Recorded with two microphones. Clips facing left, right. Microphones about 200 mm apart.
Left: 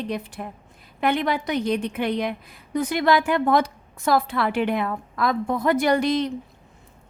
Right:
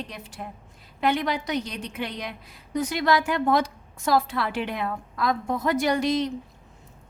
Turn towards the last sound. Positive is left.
turn(degrees=55)  # may be behind; listen again after turning